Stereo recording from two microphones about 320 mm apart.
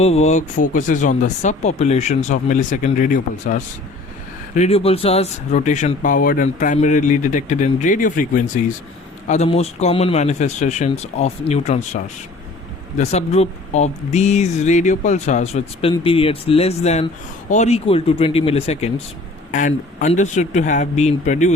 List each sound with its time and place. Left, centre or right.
0.0 s speech: centre
13.0 s speech: centre